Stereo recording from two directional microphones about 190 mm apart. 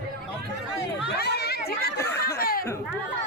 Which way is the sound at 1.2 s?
55° left (ahead or behind).